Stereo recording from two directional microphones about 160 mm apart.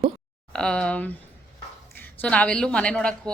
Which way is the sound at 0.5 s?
5° left (ahead or behind).